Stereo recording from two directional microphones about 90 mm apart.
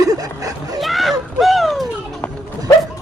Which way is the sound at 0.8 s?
Centre (ahead or behind).